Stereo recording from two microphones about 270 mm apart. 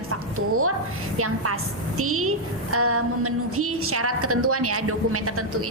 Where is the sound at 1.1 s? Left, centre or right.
Right.